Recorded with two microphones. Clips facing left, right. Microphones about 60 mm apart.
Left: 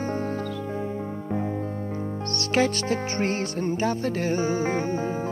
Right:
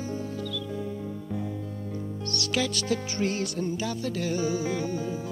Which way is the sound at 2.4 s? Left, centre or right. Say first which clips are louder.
Left 6 dB; left.